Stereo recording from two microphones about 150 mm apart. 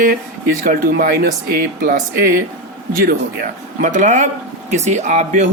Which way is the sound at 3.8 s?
55° right (ahead or behind).